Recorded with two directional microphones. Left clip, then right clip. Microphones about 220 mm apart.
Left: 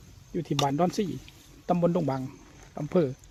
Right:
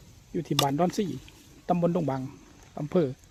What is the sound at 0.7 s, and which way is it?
Speech, 5° right (ahead or behind).